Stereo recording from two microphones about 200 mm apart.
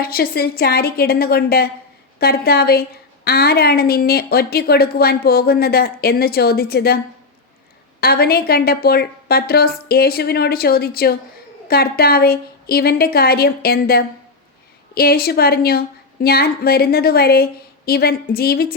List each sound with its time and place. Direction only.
0.0 s a woman's voice: 50° left (ahead or behind)
8.0 s a woman's voice: 50° left (ahead or behind)